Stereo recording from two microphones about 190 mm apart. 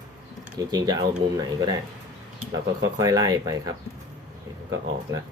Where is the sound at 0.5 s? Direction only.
20° right (ahead or behind).